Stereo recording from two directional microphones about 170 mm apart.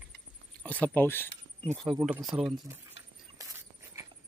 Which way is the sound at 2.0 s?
10° right (ahead or behind).